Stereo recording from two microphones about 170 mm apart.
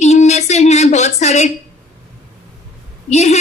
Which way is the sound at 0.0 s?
40° left (ahead or behind).